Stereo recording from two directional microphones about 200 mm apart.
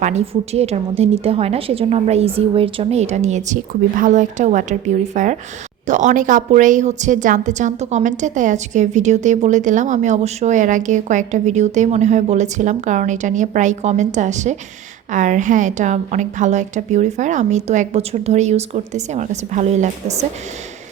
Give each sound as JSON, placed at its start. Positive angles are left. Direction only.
{"t": 0.0, "sound": "a woman's voice", "side_deg": -35}